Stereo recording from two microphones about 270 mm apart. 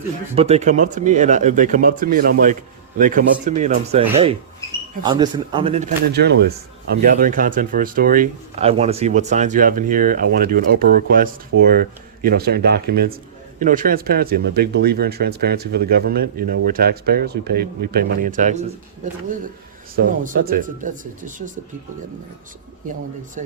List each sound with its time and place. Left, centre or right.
0.3 s speech: right
4.6 s a sound: centre
5.0 s a man's voice: centre
6.1 s speech: right
20.0 s speech: right